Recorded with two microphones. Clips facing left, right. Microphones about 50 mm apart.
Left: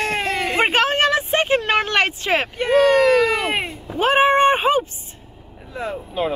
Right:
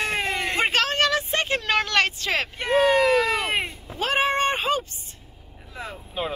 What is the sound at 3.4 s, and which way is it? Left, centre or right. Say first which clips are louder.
Speech: left 3 dB; centre.